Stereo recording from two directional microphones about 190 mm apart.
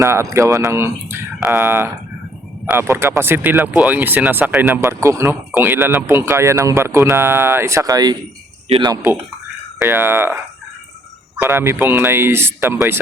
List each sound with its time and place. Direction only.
0.0 s speech: 15° right (ahead or behind)
11.3 s speech: 10° right (ahead or behind)